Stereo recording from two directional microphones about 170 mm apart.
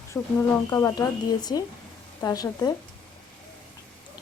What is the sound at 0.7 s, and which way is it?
A woman's voice, 20° left (ahead or behind).